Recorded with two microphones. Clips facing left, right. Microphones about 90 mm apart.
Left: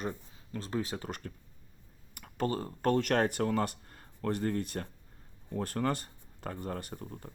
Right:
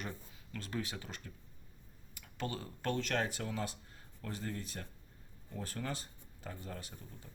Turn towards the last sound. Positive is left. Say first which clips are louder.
# left 9 dB
turn(degrees=55)  # may be behind; listen again after turning